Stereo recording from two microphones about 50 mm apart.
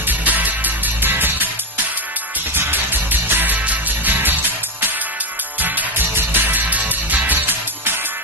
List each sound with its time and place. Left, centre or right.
0.1 s music: right
2.6 s music: right
6.1 s music: right